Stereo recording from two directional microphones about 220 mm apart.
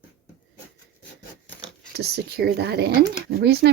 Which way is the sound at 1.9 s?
45° right (ahead or behind).